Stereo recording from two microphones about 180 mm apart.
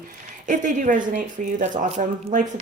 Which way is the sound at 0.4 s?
45° right (ahead or behind).